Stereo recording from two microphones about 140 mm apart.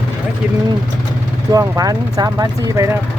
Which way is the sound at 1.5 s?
25° right (ahead or behind).